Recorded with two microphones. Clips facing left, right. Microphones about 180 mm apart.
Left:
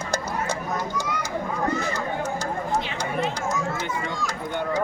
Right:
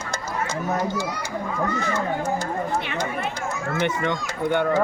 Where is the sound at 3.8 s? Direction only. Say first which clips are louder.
Right 5 dB; 70° right (ahead or behind).